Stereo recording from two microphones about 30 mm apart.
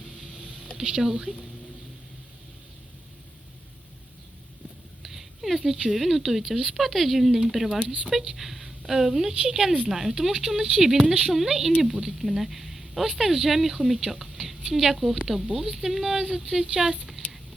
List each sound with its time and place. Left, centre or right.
0.8 s speech: centre
5.0 s a sound: centre
5.9 s a woman's voice: centre
10.9 s speech: right
11.2 s speech: centre
17.2 s a sound: left